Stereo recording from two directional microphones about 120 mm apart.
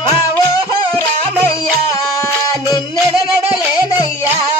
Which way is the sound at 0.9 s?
20° left (ahead or behind).